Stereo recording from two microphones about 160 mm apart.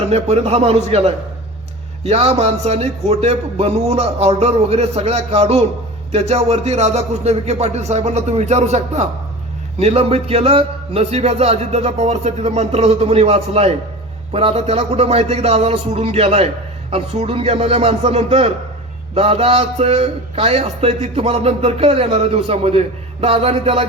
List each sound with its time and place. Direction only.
0.1 s a man's voice: 40° right (ahead or behind)